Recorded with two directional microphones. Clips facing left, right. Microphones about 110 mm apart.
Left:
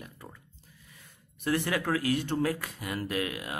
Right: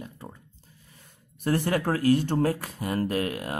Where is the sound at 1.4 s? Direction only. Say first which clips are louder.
Right 4 dB; 40° right (ahead or behind).